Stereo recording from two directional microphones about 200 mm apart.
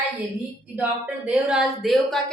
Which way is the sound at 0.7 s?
5° right (ahead or behind).